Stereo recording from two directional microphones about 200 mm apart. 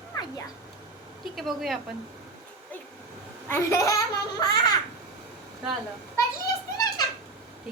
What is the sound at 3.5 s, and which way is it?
Speech, 15° left (ahead or behind).